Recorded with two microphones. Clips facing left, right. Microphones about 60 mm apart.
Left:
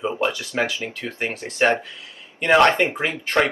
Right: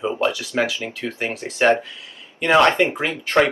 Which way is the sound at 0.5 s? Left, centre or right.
Centre.